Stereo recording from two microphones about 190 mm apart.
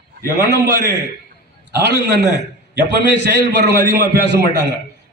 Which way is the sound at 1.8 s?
60° right (ahead or behind).